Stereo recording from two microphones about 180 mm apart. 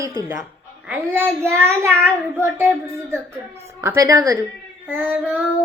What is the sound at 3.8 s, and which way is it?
Speech, 15° right (ahead or behind).